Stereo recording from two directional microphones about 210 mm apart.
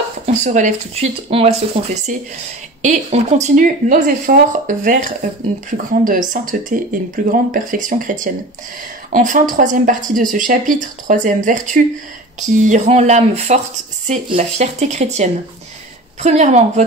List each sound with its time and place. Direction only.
0.4 s speech: 35° right (ahead or behind)